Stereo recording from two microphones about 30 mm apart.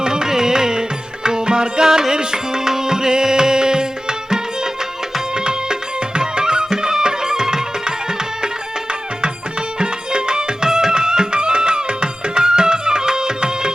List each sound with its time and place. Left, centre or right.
0.0 s music: right